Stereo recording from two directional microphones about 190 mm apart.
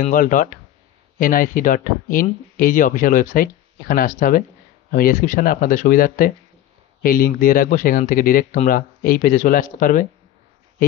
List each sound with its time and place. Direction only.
0.0 s speech: 45° left (ahead or behind)